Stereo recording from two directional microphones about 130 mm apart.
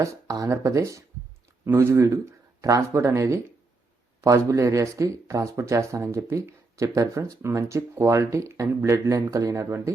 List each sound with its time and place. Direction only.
0.0 s speech: 25° right (ahead or behind)